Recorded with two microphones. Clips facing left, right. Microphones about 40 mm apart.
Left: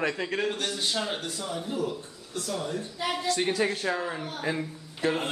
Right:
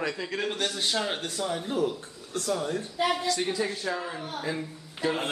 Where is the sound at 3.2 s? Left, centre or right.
Left.